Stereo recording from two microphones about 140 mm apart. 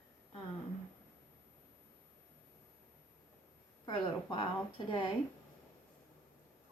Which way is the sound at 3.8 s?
35° left (ahead or behind).